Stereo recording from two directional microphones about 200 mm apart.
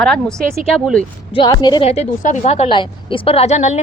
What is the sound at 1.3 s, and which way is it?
A woman's voice, 25° left (ahead or behind).